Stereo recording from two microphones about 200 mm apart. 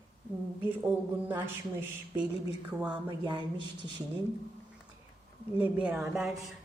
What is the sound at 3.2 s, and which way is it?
Speech, 20° right (ahead or behind).